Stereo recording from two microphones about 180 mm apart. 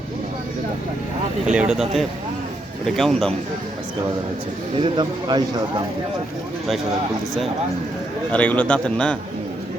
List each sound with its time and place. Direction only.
1.5 s speech: 5° right (ahead or behind)
4.8 s speech: 25° right (ahead or behind)
8.3 s a man's voice: 10° left (ahead or behind)